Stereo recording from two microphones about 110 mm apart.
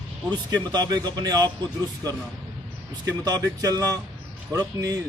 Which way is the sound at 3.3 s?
35° right (ahead or behind).